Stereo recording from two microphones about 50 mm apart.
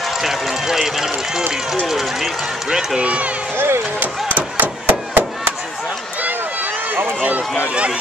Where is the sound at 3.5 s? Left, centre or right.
Right.